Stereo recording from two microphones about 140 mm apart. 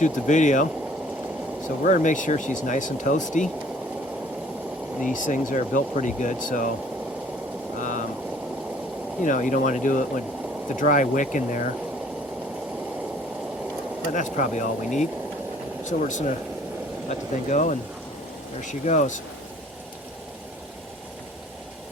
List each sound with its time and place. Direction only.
0.0 s speech: 60° left (ahead or behind)
1.8 s speech: 65° left (ahead or behind)
5.1 s speech: 65° left (ahead or behind)
7.8 s vehicle: 65° left (ahead or behind)
9.2 s speech: 70° left (ahead or behind)
14.1 s speech: 65° left (ahead or behind)
15.8 s speech: 60° left (ahead or behind)